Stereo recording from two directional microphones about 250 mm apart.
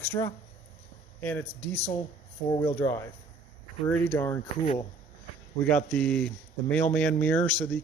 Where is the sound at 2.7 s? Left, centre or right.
Centre.